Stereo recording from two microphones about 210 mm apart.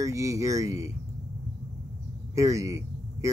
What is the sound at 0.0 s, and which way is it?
Speech, 15° right (ahead or behind).